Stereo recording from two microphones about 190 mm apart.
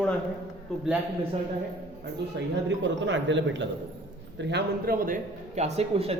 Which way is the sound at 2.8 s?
70° right (ahead or behind).